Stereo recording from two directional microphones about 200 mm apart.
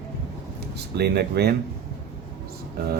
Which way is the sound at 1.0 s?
55° right (ahead or behind).